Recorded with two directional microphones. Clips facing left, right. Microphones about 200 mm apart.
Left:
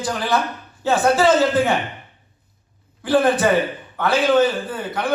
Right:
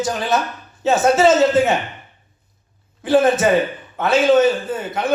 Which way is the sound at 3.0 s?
25° right (ahead or behind).